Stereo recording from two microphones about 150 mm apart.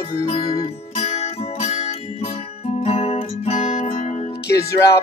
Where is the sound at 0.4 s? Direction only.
25° left (ahead or behind).